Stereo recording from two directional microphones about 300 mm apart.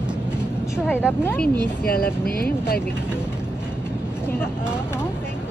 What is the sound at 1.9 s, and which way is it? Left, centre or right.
Speech, left.